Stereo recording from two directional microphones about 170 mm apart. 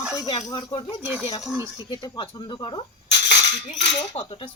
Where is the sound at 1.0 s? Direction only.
10° right (ahead or behind).